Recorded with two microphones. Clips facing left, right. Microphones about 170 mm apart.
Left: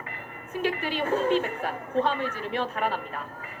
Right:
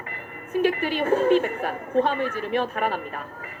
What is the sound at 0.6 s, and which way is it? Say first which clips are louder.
A woman's voice: right 5 dB; 55° right (ahead or behind).